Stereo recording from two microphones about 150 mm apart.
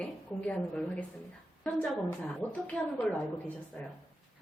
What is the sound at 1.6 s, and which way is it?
A woman's voice, 10° left (ahead or behind).